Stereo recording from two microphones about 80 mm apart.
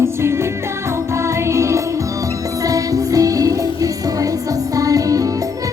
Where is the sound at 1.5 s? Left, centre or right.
Right.